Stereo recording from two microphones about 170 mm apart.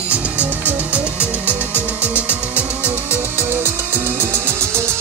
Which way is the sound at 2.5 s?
10° right (ahead or behind).